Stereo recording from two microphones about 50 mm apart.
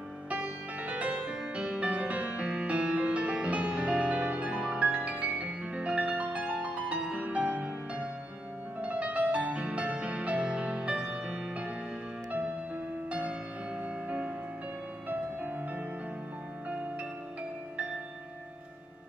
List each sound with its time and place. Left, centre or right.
0.3 s music: right
12.3 s music: right